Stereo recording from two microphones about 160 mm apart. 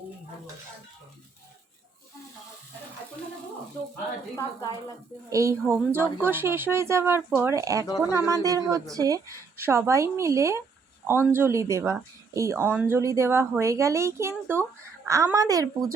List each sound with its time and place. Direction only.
5.3 s a woman's voice: 20° right (ahead or behind)